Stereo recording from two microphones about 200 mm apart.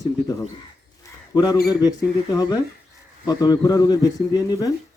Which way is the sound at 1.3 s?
20° left (ahead or behind).